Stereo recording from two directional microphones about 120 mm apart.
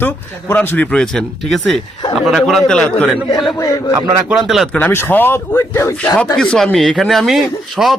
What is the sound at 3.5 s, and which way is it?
Speech, 25° left (ahead or behind).